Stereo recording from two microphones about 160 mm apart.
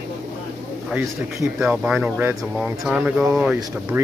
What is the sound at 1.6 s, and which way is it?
Speech, 5° right (ahead or behind).